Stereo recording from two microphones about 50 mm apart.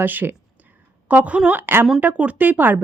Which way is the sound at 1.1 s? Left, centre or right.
Right.